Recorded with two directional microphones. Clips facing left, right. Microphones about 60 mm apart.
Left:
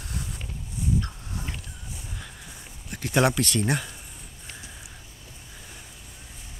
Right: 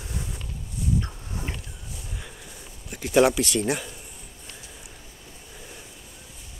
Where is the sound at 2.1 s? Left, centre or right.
Centre.